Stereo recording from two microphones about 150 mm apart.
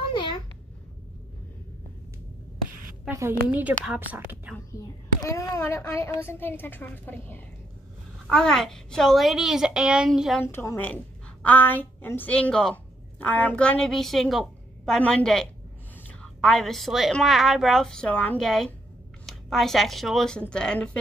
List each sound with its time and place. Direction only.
3.1 s a woman's voice: 15° right (ahead or behind)
4.7 s a child's voice: 20° left (ahead or behind); by 10.4 s centre (ahead or behind)
10.4 s a child's voice: 15° left (ahead or behind)